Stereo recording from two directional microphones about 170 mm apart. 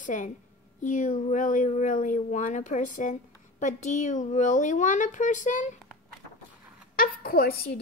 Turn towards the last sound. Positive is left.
turn(degrees=65)  # may be behind; listen again after turning